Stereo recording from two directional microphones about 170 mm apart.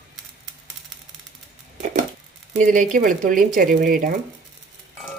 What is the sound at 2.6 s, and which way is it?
Speech, 50° right (ahead or behind).